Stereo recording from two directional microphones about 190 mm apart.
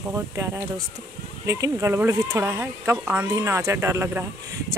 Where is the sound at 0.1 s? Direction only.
15° right (ahead or behind).